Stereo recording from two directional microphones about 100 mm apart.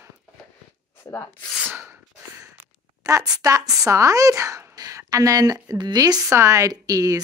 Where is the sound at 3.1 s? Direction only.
35° right (ahead or behind).